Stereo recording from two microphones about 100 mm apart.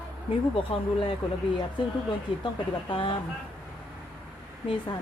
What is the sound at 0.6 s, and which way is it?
Speech, 60° left (ahead or behind).